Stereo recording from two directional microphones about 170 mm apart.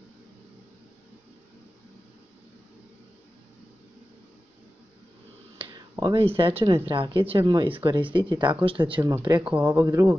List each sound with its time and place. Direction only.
5.6 s speech: 25° right (ahead or behind)
9.4 s speech: 10° right (ahead or behind)